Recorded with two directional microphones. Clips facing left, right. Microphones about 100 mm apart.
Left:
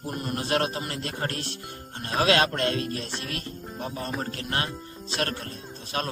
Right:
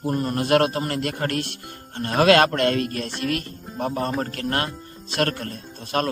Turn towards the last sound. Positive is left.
turn(degrees=-55)  # may be behind; listen again after turning